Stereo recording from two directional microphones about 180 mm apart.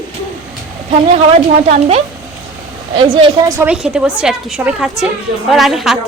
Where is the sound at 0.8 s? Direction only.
35° right (ahead or behind).